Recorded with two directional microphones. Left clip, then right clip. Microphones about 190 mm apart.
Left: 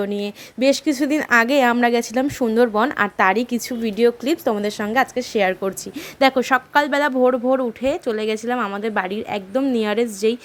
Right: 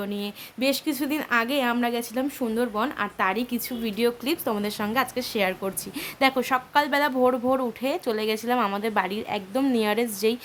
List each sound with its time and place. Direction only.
0.0 s a woman's voice: 30° left (ahead or behind)